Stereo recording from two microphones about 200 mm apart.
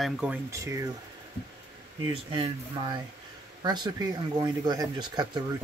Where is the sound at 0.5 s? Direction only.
15° right (ahead or behind).